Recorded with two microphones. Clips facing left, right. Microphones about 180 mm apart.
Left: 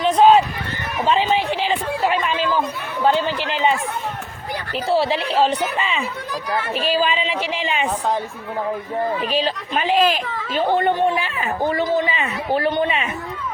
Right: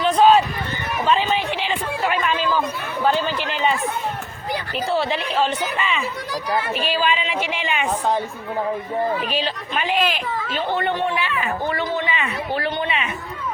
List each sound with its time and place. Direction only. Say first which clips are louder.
0.0 s a sound: left 1 dB; 20° left (ahead or behind)
1.5 s speech: left 3 dB; 35° left (ahead or behind)
4.9 s a woman's voice: left 4 dB; 30° left (ahead or behind)
9.3 s a woman's voice: left 3 dB; 35° left (ahead or behind)